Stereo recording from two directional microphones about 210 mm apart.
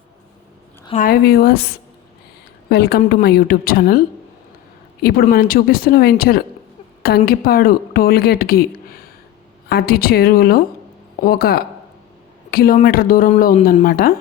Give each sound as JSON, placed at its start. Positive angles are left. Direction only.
{"t": 1.0, "sound": "speech", "side_deg": 45}
{"t": 2.6, "sound": "a woman's voice", "side_deg": 50}
{"t": 5.0, "sound": "speech", "side_deg": 45}
{"t": 9.6, "sound": "speech", "side_deg": 45}